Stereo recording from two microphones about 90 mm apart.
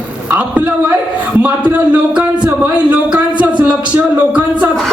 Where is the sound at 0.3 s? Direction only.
15° right (ahead or behind).